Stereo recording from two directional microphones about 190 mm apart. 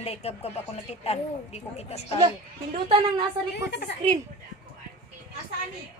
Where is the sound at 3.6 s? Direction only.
60° left (ahead or behind).